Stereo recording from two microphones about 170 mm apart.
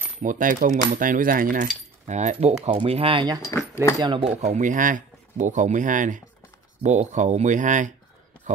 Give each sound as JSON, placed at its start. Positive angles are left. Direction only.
{"t": 0.2, "sound": "keys jangling", "side_deg": -50}
{"t": 3.4, "sound": "speech", "side_deg": 15}
{"t": 4.0, "sound": "speech", "side_deg": -25}
{"t": 4.4, "sound": "keys jangling", "side_deg": -45}